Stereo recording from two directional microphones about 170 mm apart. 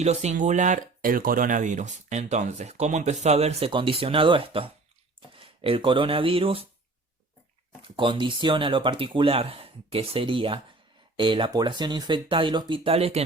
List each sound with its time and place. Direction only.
0.0 s speech: 40° right (ahead or behind)
7.8 s speech: 30° right (ahead or behind)